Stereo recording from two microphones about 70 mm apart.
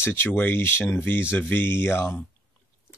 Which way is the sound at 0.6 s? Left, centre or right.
Left.